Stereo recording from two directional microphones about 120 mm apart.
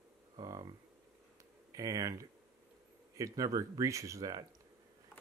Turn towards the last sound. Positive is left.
turn(degrees=-30)  # may be behind; listen again after turning